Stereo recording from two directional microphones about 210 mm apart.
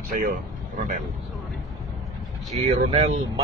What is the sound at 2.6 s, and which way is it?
Speech, 30° right (ahead or behind).